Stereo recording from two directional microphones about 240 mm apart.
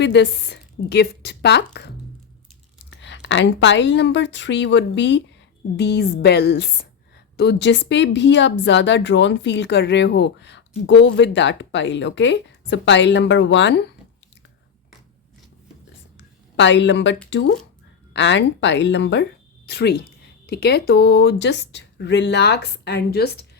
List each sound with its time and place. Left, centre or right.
0.0 s speech: left
3.0 s speech: left
16.1 s a sound: left
17.2 s speech: left